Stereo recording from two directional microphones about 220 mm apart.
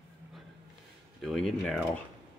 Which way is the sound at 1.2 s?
Centre (ahead or behind).